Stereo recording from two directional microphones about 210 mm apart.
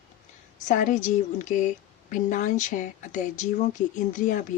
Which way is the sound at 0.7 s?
35° left (ahead or behind).